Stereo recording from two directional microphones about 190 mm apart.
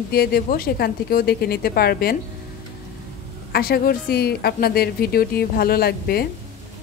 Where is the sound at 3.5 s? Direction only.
55° left (ahead or behind).